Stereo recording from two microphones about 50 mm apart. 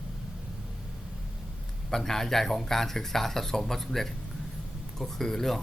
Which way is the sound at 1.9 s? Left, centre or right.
Centre.